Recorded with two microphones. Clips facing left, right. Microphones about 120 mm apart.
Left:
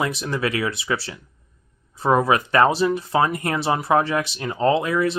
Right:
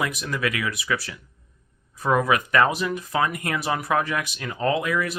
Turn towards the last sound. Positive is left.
turn(degrees=30)  # may be behind; listen again after turning